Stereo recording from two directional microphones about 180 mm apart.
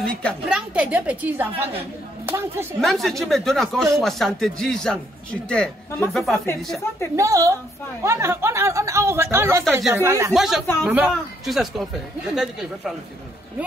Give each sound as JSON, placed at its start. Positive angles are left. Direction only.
{"t": 0.0, "sound": "a woman's voice", "side_deg": 5}
{"t": 0.5, "sound": "a woman's voice", "side_deg": -5}
{"t": 2.8, "sound": "speech", "side_deg": 0}
{"t": 7.2, "sound": "a woman's voice", "side_deg": -20}
{"t": 10.3, "sound": "a woman's voice", "side_deg": 0}